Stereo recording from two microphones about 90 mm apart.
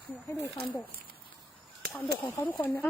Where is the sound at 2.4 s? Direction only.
20° left (ahead or behind).